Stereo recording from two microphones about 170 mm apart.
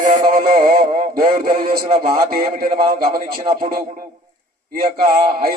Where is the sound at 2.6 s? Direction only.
50° right (ahead or behind).